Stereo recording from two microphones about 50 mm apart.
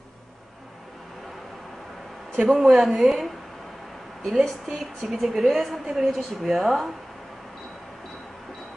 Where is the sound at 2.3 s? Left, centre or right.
Right.